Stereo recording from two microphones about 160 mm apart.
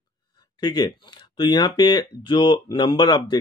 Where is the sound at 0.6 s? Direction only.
25° left (ahead or behind).